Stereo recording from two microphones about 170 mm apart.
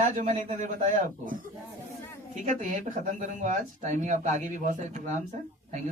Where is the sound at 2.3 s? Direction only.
45° right (ahead or behind).